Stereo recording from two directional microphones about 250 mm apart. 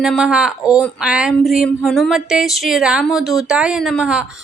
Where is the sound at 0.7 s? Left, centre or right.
Centre.